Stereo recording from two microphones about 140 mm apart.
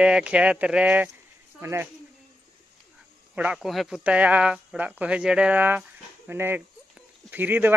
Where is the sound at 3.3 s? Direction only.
5° right (ahead or behind).